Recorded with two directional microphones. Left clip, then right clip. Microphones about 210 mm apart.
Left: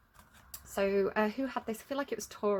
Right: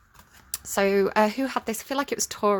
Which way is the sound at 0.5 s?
35° right (ahead or behind).